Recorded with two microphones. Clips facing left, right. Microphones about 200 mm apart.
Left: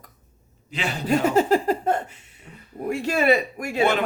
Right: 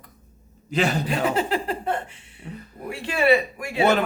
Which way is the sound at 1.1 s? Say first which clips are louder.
Left 5 dB; 45° left (ahead or behind).